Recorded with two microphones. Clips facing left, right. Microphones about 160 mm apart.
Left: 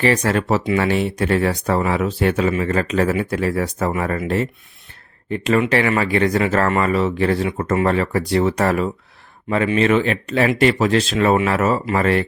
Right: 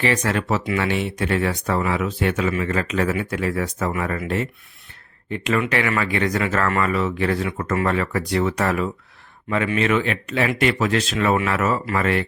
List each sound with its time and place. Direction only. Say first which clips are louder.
0.0 s speech: left 4 dB; 35° left (ahead or behind)
5.3 s speech: left 4 dB; 35° left (ahead or behind)